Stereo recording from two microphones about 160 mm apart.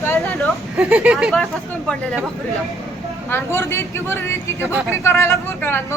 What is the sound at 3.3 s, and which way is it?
Speech, 15° left (ahead or behind).